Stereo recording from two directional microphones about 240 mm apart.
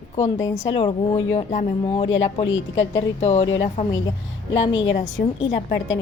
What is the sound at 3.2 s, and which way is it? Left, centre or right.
Speech, left.